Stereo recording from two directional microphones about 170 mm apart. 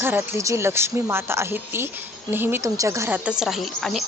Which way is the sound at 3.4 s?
Centre (ahead or behind).